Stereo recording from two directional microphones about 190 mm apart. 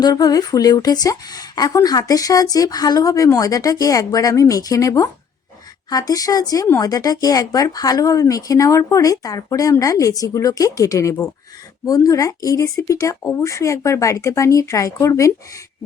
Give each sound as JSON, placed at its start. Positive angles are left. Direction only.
{"t": 0.0, "sound": "speech", "side_deg": 20}